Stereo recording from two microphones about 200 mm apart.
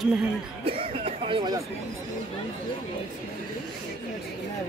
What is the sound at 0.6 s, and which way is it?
Speech, 30° right (ahead or behind).